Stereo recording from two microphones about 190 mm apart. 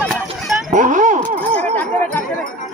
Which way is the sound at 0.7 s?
40° right (ahead or behind).